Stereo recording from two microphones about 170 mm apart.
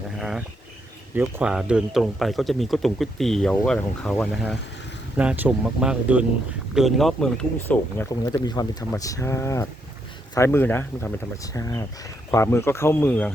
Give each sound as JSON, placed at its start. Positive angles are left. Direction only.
{"t": 0.2, "sound": "a sound", "side_deg": 0}
{"t": 1.1, "sound": "speech", "side_deg": -10}
{"t": 5.1, "sound": "speech", "side_deg": -10}
{"t": 8.2, "sound": "speech", "side_deg": 25}